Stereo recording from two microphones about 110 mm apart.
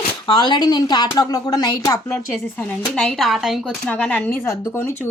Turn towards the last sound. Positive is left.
turn(degrees=20)  # may be behind; listen again after turning